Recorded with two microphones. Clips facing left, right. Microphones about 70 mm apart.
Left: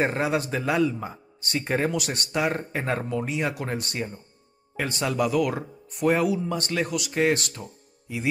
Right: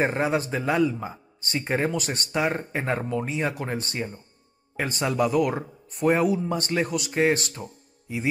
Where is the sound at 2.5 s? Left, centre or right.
Centre.